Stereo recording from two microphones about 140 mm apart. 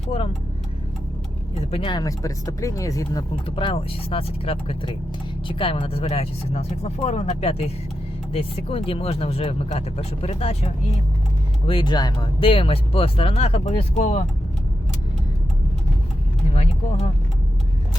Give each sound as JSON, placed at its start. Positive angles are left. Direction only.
{"t": 1.7, "sound": "speech", "side_deg": 35}
{"t": 3.4, "sound": "speech", "side_deg": 40}
{"t": 11.6, "sound": "speech", "side_deg": 35}
{"t": 16.5, "sound": "speech", "side_deg": 50}